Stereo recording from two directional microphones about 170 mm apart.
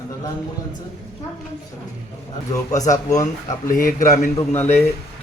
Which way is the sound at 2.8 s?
20° left (ahead or behind).